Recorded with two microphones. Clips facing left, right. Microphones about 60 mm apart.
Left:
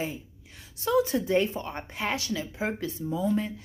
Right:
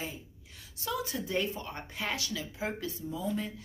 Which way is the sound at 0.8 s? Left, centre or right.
Left.